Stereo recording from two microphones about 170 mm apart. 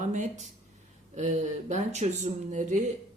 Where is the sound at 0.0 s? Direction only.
45° right (ahead or behind).